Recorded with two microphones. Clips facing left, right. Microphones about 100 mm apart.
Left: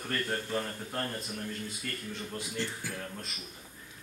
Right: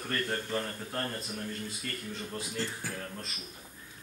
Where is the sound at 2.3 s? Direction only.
35° right (ahead or behind).